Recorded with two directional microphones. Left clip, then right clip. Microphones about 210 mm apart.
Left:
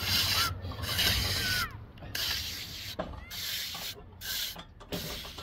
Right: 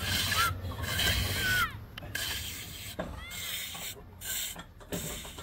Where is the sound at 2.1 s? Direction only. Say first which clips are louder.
Left 3 dB; 15° right (ahead or behind).